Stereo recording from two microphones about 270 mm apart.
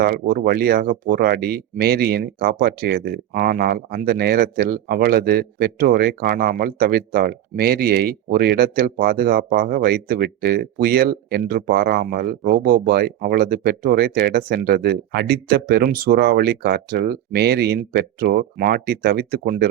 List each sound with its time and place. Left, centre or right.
0.0 s speech: right